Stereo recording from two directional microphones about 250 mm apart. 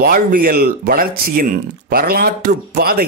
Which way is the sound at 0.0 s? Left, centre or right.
Right.